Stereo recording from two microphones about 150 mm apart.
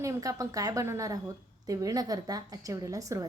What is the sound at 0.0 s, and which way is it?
A woman's voice, 20° right (ahead or behind).